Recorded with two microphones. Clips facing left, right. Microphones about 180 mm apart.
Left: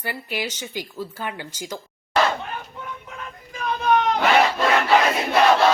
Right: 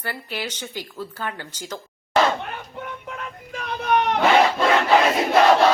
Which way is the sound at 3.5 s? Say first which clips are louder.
Left 2 dB; 65° right (ahead or behind).